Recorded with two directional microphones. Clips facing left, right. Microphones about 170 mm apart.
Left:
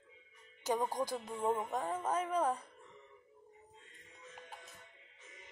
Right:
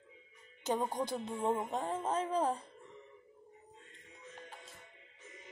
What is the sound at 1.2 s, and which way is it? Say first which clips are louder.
Music: right 1 dB; 25° right (ahead or behind).